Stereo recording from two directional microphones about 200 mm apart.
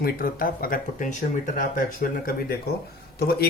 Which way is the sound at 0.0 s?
45° left (ahead or behind).